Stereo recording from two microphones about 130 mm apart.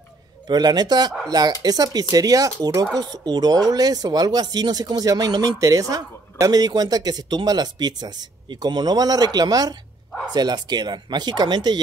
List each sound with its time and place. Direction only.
0.5 s speech: 35° right (ahead or behind)